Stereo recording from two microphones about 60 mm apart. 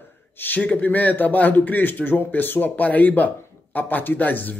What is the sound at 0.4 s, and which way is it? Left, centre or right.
A man's voice, left.